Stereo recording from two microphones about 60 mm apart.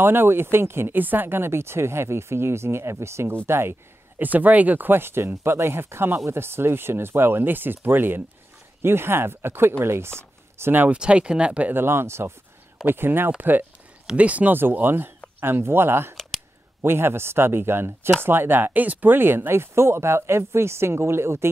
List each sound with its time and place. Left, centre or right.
0.0 s speech: right
4.2 s speech: right
10.9 s speech: centre
11.7 s speech: right